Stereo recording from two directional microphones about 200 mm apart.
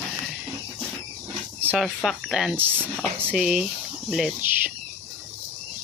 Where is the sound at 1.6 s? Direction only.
10° right (ahead or behind).